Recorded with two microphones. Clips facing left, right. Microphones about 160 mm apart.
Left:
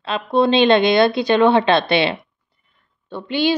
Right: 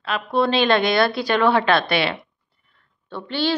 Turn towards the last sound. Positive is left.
turn(degrees=15)  # may be behind; listen again after turning